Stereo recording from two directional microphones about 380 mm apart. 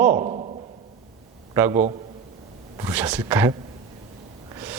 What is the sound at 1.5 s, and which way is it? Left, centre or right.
A man's voice, centre.